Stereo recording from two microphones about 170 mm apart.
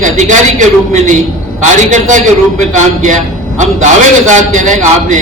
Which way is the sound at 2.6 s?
45° right (ahead or behind).